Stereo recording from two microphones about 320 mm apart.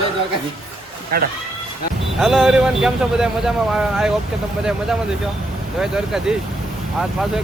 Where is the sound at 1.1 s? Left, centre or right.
Right.